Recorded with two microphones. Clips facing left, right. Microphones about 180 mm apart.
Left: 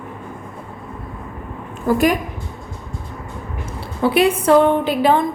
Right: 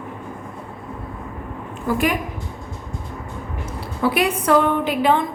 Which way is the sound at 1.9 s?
40° left (ahead or behind).